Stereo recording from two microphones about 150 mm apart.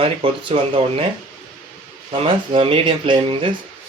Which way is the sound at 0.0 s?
35° right (ahead or behind).